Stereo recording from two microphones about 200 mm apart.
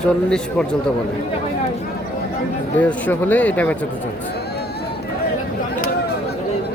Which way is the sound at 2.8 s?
5° left (ahead or behind).